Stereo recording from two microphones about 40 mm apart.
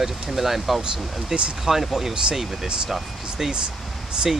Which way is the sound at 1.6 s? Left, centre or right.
Centre.